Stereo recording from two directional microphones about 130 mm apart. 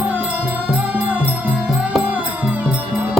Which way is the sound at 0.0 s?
10° right (ahead or behind).